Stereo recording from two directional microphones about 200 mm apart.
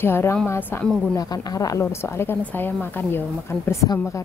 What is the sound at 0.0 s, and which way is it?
A woman's voice, 10° left (ahead or behind).